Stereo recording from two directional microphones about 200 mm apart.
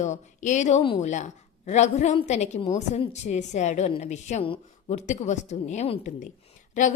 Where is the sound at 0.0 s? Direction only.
35° left (ahead or behind).